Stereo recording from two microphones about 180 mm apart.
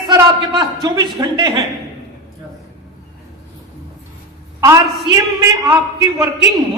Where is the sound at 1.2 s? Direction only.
20° right (ahead or behind).